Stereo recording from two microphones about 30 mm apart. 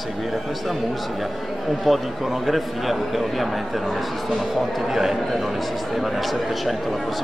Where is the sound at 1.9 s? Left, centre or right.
Centre.